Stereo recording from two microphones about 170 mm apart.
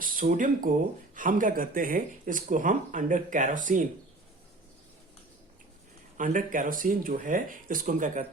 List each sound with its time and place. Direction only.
0.0 s speech: 55° right (ahead or behind)
6.1 s speech: 50° right (ahead or behind)